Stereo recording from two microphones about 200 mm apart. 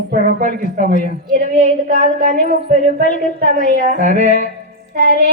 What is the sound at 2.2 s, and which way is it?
Music, 45° right (ahead or behind).